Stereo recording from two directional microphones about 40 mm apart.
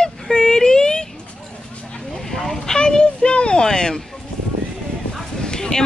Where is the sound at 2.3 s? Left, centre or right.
Centre.